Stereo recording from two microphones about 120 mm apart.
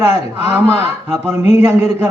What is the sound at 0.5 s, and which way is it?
A man's voice, 20° right (ahead or behind).